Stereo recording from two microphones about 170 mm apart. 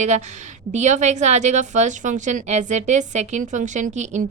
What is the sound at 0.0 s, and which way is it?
A woman's voice, 45° right (ahead or behind).